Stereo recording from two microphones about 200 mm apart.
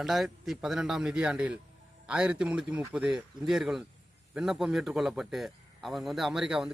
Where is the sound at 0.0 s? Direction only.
Centre (ahead or behind).